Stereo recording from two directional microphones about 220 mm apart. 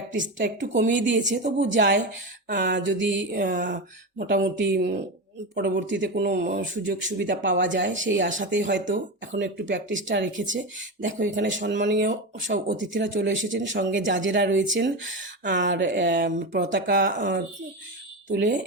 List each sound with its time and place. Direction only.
0.1 s speech: 55° right (ahead or behind)
3.4 s speech: 40° right (ahead or behind)
4.2 s speech: 50° right (ahead or behind)
12.5 s speech: 35° right (ahead or behind)
12.8 s speech: 55° right (ahead or behind)
16.2 s speech: 40° right (ahead or behind)
16.6 s speech: 50° right (ahead or behind)